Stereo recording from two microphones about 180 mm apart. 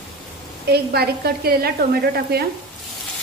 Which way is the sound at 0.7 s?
60° right (ahead or behind).